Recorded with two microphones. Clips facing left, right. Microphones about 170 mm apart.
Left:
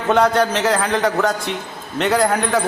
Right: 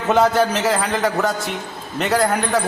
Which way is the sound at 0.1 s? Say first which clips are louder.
Even; 5° right (ahead or behind).